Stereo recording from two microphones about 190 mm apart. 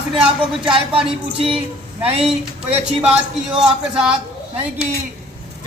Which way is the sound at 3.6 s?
5° right (ahead or behind).